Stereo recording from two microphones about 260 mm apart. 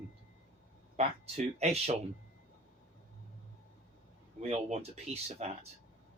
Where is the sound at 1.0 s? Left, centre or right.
Right.